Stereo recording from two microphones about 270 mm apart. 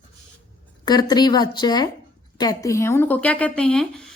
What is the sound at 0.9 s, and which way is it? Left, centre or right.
Speech, centre.